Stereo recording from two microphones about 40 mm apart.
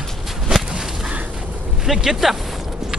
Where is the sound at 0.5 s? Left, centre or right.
Centre.